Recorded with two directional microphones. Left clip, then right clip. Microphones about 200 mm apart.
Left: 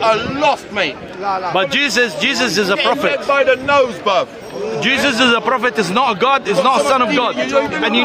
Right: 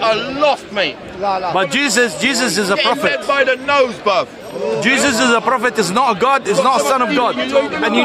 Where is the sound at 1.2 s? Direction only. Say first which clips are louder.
Right 1 dB; 55° right (ahead or behind).